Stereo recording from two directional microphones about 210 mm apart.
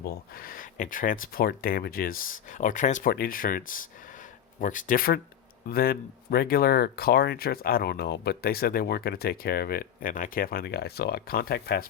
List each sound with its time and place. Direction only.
0.0 s speech: 45° left (ahead or behind)